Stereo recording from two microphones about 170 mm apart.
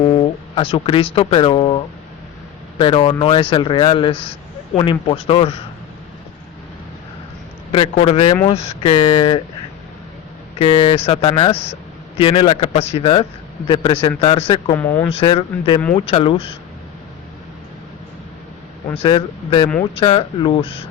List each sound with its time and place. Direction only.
0.5 s speech: 30° left (ahead or behind)
7.7 s speech: 35° left (ahead or behind)
10.6 s speech: 30° left (ahead or behind)
14.8 s speech: 10° left (ahead or behind)
15.1 s speech: 35° left (ahead or behind)
18.9 s speech: 30° left (ahead or behind)